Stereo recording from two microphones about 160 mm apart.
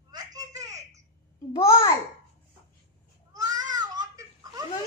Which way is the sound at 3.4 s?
25° right (ahead or behind).